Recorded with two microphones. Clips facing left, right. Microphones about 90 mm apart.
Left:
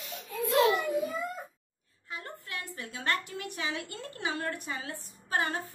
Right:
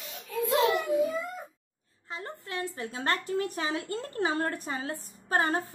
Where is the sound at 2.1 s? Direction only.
30° right (ahead or behind).